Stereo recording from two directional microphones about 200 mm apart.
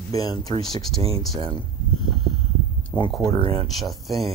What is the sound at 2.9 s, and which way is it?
Speech, 20° left (ahead or behind).